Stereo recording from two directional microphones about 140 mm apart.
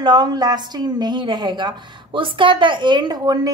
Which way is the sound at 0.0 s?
30° right (ahead or behind).